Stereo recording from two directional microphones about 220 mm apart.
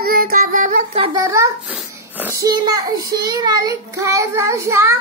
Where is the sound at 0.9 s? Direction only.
20° right (ahead or behind).